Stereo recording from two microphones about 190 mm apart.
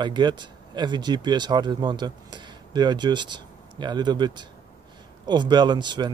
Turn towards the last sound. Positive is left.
turn(degrees=-25)  # may be behind; listen again after turning